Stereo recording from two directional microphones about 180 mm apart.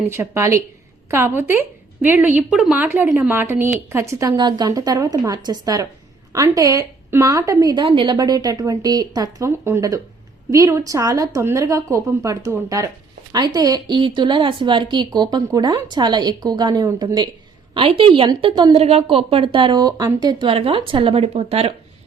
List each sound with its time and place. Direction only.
0.1 s speech: 15° right (ahead or behind)
17.7 s speech: 30° right (ahead or behind)